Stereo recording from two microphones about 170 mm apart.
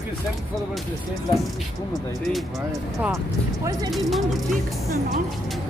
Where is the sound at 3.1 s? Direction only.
20° right (ahead or behind).